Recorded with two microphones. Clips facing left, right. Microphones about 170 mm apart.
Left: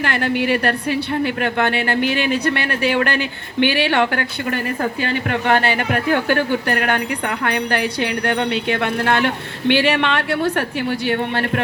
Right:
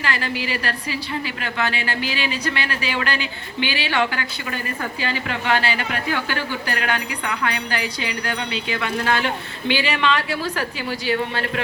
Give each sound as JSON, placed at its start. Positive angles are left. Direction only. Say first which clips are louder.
{"t": 0.0, "sound": "a woman's voice", "louder": "left 6 dB", "side_deg": 60}